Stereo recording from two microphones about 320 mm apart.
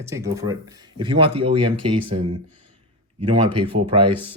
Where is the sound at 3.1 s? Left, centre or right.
Centre.